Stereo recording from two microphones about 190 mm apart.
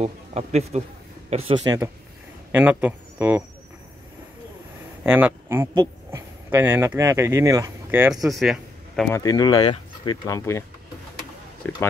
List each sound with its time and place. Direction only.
0.0 s speech: 35° right (ahead or behind)
1.6 s speech: 20° right (ahead or behind)
2.5 s a man's voice: 10° right (ahead or behind)
5.0 s speech: 10° right (ahead or behind)
9.1 s speech: 20° left (ahead or behind)
11.6 s speech: 10° left (ahead or behind)